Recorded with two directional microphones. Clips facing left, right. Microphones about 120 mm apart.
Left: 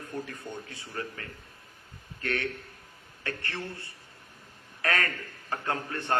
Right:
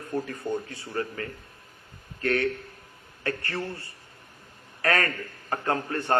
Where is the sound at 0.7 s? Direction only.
40° right (ahead or behind).